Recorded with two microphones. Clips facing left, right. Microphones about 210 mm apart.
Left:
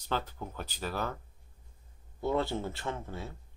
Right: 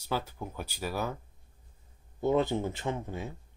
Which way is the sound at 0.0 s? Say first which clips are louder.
Right 1 dB; 10° right (ahead or behind).